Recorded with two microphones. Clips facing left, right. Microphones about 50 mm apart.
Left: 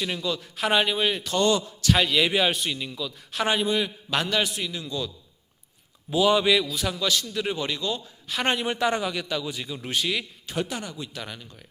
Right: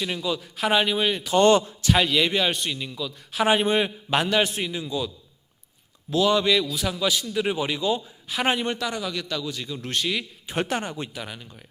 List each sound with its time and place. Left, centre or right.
0.0 s a man's voice: centre
1.4 s a man's voice: right
1.9 s a man's voice: centre
3.6 s a man's voice: right
4.1 s a man's voice: centre
6.1 s a man's voice: centre
7.0 s a man's voice: centre
8.3 s a man's voice: centre
8.8 s a man's voice: left; by 10.2 s centre
10.5 s a man's voice: right
11.1 s a man's voice: centre